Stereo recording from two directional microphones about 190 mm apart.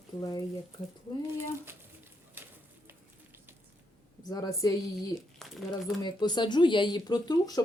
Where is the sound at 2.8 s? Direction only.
10° right (ahead or behind).